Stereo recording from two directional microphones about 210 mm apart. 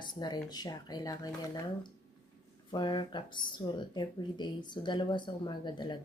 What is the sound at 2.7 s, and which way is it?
Speech, 20° left (ahead or behind).